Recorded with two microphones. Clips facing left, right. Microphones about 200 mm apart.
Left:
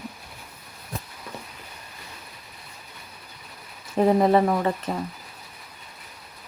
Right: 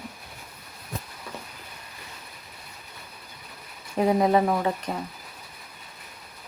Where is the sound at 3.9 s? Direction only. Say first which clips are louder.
Left 2 dB; centre (ahead or behind).